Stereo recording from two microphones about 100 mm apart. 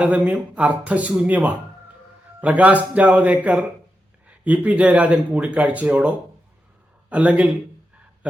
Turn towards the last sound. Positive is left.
turn(degrees=-15)  # may be behind; listen again after turning